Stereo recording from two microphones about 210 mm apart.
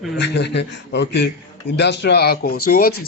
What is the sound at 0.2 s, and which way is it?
Speech, 55° left (ahead or behind).